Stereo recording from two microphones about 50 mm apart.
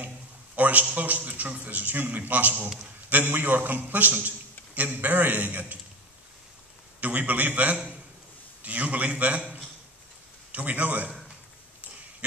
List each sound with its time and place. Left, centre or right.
0.6 s a sound: right
0.9 s a man's voice: right
7.0 s a man's voice: right